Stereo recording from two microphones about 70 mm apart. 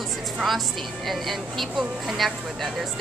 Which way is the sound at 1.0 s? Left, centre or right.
Centre.